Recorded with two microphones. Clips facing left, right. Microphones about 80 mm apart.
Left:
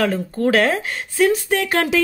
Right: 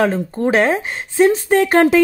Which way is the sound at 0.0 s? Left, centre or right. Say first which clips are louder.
Right 2 dB; right.